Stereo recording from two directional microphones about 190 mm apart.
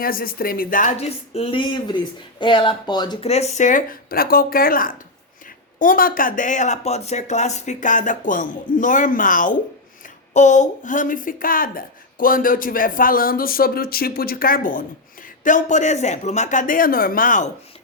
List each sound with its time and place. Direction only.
0.0 s speech: 50° left (ahead or behind)